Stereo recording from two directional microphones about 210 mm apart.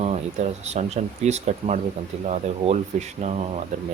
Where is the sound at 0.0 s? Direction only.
35° right (ahead or behind).